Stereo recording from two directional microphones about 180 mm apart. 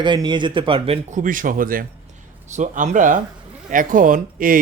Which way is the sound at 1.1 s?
50° right (ahead or behind).